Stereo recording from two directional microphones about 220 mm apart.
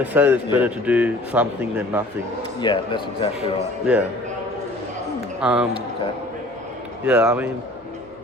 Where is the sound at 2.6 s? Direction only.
20° left (ahead or behind).